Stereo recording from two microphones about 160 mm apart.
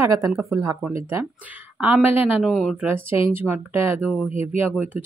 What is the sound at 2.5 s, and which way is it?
Speech, centre (ahead or behind).